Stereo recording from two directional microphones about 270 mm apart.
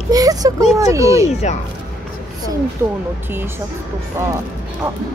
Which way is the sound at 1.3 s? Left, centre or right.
Left.